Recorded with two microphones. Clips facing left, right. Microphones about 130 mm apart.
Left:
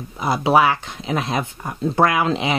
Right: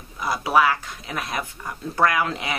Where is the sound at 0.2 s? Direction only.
25° left (ahead or behind).